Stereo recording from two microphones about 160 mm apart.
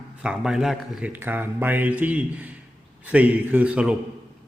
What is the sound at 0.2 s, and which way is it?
A man's voice, 5° right (ahead or behind).